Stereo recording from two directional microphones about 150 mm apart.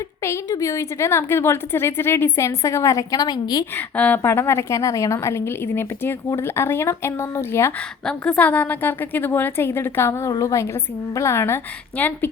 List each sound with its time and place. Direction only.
0.3 s a woman's voice: 20° left (ahead or behind)
3.8 s a woman's voice: 10° left (ahead or behind)